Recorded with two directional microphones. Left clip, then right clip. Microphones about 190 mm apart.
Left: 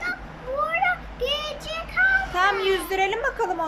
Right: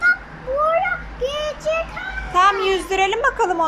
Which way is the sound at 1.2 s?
25° left (ahead or behind).